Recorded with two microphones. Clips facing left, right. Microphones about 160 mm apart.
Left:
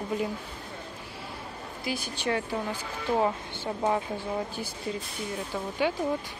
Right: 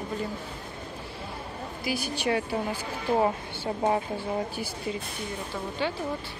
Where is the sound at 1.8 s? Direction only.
10° right (ahead or behind).